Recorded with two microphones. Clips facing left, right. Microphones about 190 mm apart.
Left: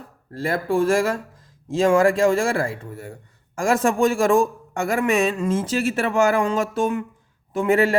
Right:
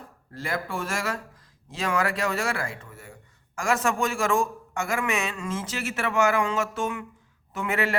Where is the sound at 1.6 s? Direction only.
45° left (ahead or behind).